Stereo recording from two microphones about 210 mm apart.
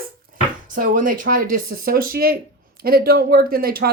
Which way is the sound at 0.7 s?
40° right (ahead or behind).